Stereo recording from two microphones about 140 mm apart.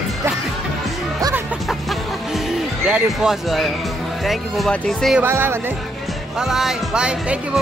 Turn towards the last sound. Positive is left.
turn(degrees=-5)  # may be behind; listen again after turning